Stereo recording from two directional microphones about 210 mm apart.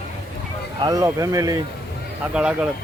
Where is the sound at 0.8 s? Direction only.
15° right (ahead or behind).